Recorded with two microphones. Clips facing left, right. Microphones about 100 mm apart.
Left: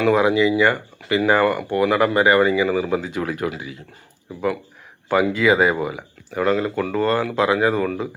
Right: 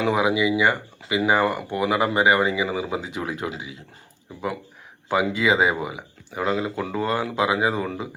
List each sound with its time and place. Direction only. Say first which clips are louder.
0.0 s speech: left 4 dB; 15° right (ahead or behind)
5.0 s speech: left 4 dB; 20° right (ahead or behind)